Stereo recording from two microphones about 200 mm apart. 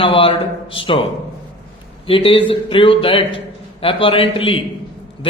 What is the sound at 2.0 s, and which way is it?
A man's voice, 25° left (ahead or behind).